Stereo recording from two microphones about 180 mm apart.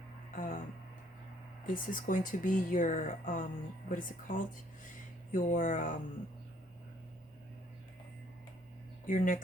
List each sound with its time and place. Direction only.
0.3 s a sound: 45° left (ahead or behind)
1.6 s speech: 50° left (ahead or behind)
9.0 s speech: 45° left (ahead or behind)